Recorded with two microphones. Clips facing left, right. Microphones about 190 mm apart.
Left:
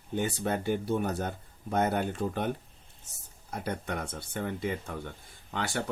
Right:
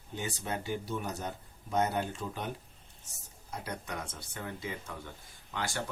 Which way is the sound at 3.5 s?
55° left (ahead or behind).